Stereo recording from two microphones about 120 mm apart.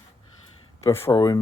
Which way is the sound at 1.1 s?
35° left (ahead or behind).